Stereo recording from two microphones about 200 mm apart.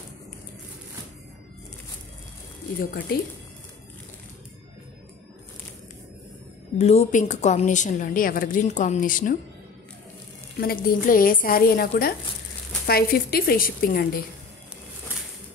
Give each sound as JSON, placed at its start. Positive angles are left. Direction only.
{"t": 2.8, "sound": "a woman's voice", "side_deg": 50}
{"t": 6.8, "sound": "a woman's voice", "side_deg": 30}
{"t": 10.6, "sound": "a woman's voice", "side_deg": 50}